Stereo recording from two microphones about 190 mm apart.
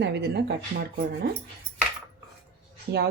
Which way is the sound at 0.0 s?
60° right (ahead or behind).